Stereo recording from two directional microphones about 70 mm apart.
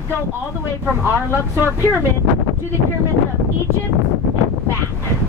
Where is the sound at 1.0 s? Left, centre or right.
Right.